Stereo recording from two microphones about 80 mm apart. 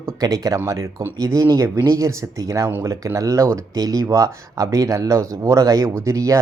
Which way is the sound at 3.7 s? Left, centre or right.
Right.